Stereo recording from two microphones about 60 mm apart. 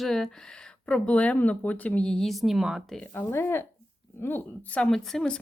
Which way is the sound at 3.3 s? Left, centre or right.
Left.